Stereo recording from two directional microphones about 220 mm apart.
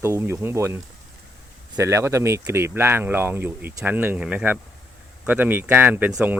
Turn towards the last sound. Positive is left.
turn(degrees=-10)  # may be behind; listen again after turning